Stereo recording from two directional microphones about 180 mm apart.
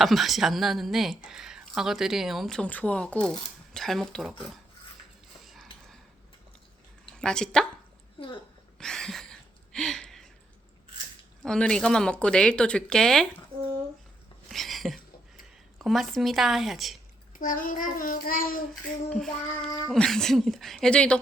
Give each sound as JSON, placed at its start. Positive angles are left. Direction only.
{"t": 0.0, "sound": "speech", "side_deg": 0}
{"t": 7.2, "sound": "speech", "side_deg": 5}
{"t": 8.8, "sound": "a sound", "side_deg": 0}
{"t": 11.4, "sound": "speech", "side_deg": 5}
{"t": 14.5, "sound": "a sound", "side_deg": 0}
{"t": 15.8, "sound": "speech", "side_deg": 0}
{"t": 17.3, "sound": "child singing", "side_deg": 50}
{"t": 19.1, "sound": "speech", "side_deg": 0}